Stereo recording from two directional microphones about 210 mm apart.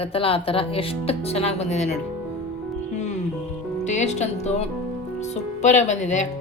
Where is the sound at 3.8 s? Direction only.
35° left (ahead or behind).